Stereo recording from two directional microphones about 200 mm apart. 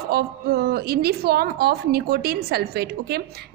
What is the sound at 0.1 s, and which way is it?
A woman's voice, 50° right (ahead or behind).